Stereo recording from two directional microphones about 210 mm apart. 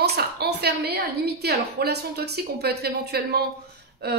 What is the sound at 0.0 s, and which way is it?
A woman's voice, 50° right (ahead or behind).